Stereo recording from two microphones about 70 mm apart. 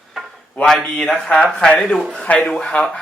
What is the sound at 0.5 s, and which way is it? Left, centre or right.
A man's voice, centre.